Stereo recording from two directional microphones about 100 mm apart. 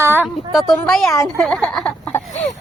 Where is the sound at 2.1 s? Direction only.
25° left (ahead or behind).